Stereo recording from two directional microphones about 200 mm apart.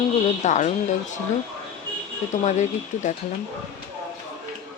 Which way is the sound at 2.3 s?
35° left (ahead or behind).